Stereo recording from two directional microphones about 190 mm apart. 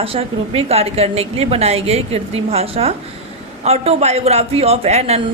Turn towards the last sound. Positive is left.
turn(degrees=-35)  # may be behind; listen again after turning